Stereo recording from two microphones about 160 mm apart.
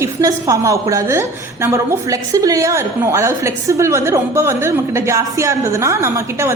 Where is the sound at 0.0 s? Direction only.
20° right (ahead or behind).